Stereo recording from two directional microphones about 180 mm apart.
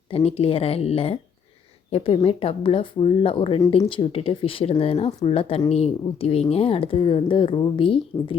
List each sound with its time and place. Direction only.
0.1 s a woman's voice: 35° left (ahead or behind)